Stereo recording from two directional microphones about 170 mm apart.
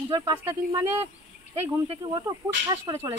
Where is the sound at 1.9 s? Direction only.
25° right (ahead or behind).